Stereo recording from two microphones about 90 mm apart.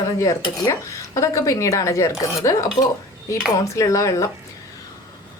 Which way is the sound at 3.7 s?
40° left (ahead or behind).